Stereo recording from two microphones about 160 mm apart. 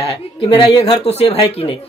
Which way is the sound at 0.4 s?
35° left (ahead or behind).